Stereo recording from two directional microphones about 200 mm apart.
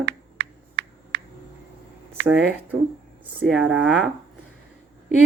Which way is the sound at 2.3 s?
5° right (ahead or behind).